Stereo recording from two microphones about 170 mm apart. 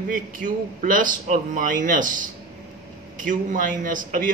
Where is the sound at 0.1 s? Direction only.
50° right (ahead or behind).